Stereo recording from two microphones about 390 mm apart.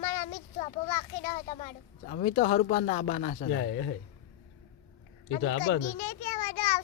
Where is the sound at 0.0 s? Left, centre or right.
Centre.